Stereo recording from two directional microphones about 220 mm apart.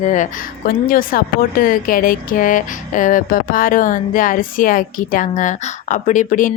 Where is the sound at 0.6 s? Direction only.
40° left (ahead or behind).